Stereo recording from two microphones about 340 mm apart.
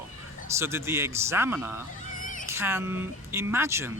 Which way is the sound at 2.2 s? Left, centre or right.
Left.